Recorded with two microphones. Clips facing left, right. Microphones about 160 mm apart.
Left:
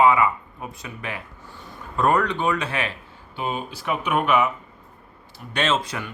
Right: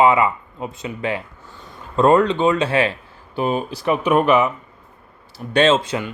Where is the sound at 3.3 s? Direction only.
45° right (ahead or behind).